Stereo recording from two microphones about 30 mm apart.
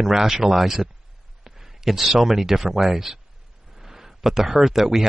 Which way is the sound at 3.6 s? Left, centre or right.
Centre.